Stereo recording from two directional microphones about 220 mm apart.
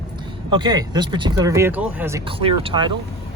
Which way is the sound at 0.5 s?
20° right (ahead or behind).